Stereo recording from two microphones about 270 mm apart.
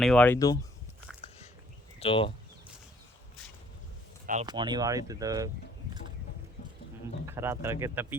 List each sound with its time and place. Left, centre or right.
0.0 s speech: centre
2.0 s speech: centre
4.4 s speech: centre
7.3 s speech: centre